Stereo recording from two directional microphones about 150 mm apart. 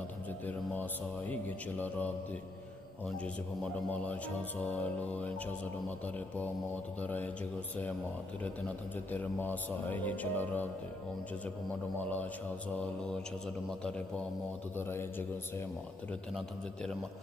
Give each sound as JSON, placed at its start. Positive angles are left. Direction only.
{"t": 1.3, "sound": "speech", "side_deg": 10}
{"t": 3.2, "sound": "speech", "side_deg": 10}
{"t": 9.1, "sound": "speech", "side_deg": 10}
{"t": 12.0, "sound": "speech", "side_deg": 10}
{"t": 13.7, "sound": "speech", "side_deg": 5}
{"t": 16.3, "sound": "a man's voice", "side_deg": 5}